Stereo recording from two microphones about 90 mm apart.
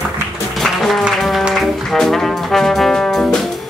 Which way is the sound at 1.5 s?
5° left (ahead or behind).